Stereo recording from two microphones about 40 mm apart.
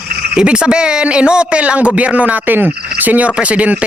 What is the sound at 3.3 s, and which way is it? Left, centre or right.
Speech, right.